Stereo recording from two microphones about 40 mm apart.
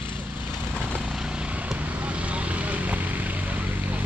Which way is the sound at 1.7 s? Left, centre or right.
Right.